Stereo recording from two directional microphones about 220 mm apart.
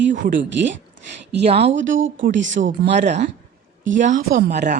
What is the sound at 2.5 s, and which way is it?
Speech, 30° right (ahead or behind).